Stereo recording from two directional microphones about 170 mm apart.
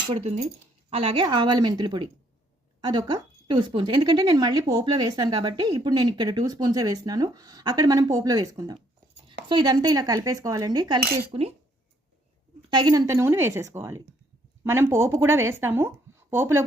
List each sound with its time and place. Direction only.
0.1 s speech: 40° right (ahead or behind)
11.3 s speech: 35° right (ahead or behind)
12.7 s speech: 25° right (ahead or behind)